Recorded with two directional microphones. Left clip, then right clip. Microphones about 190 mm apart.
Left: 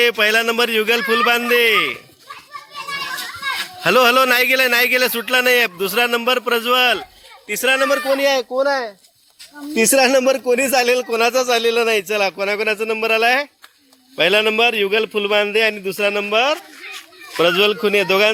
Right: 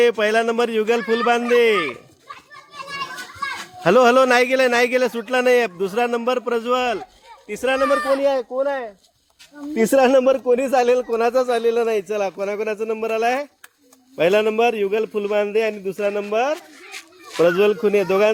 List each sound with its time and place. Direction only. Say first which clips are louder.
0.0 s a man's voice: left 2 dB; 15° right (ahead or behind)
3.8 s a man's voice: left 1 dB; 15° right (ahead or behind)
8.1 s speech: left 2 dB; 5° left (ahead or behind)
8.4 s speech: left 4 dB; 25° left (ahead or behind)
9.9 s speech: even; 5° left (ahead or behind)
17.6 s speech: left 1 dB; 5° right (ahead or behind)